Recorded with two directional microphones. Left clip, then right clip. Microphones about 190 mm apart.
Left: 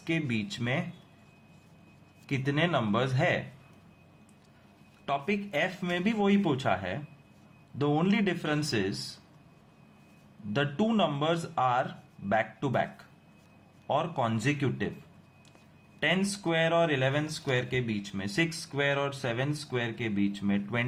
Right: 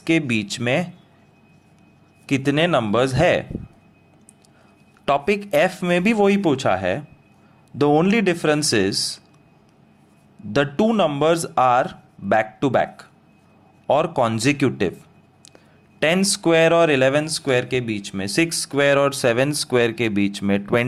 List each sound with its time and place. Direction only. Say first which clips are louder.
0.0 s speech: right 12 dB; 45° right (ahead or behind)
2.2 s speech: right 10 dB; 45° right (ahead or behind)
5.0 s speech: right 12 dB; 55° right (ahead or behind)
10.5 s speech: right 10 dB; 45° right (ahead or behind)
16.0 s speech: right 10 dB; 50° right (ahead or behind)